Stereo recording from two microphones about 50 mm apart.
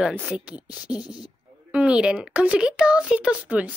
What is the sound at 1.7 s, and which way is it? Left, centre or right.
Speech, right.